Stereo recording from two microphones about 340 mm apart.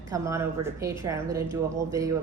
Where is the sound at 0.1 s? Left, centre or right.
Centre.